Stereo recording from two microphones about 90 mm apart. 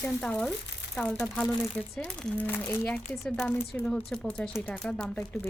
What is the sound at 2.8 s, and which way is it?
Speech, 10° left (ahead or behind).